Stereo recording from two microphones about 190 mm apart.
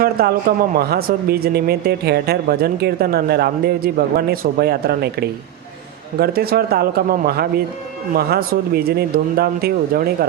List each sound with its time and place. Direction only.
0.0 s speech: 50° right (ahead or behind)